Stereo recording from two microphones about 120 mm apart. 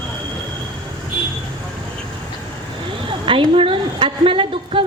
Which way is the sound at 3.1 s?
45° right (ahead or behind).